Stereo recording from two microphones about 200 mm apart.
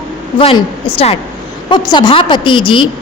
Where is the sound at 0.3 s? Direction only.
25° left (ahead or behind).